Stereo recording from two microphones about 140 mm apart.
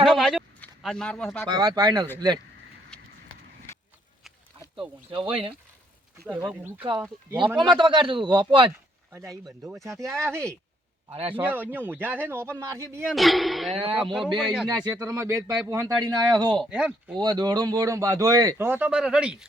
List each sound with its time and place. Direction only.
0.0 s a sound: centre (ahead or behind)
0.8 s a man's voice: 5° left (ahead or behind)
1.5 s speech: 30° right (ahead or behind)
2.9 s a sound: 5° left (ahead or behind)
5.1 s speech: 40° right (ahead or behind)
6.2 s speech: 10° right (ahead or behind)
7.8 s speech: 35° right (ahead or behind)
9.1 s speech: 20° right (ahead or behind)
11.1 s speech: 40° right (ahead or behind)
11.3 s speech: 15° right (ahead or behind)
13.1 s a man's voice: centre (ahead or behind)
14.7 s speech: 25° right (ahead or behind)
16.6 s speech: 10° right (ahead or behind)
17.2 s speech: 30° right (ahead or behind); by 19.5 s 5° right (ahead or behind)